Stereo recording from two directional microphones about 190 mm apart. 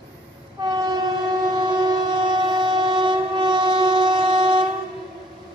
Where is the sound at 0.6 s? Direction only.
20° right (ahead or behind).